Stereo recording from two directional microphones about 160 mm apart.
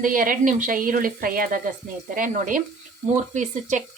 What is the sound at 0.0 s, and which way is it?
A woman's voice, 60° right (ahead or behind).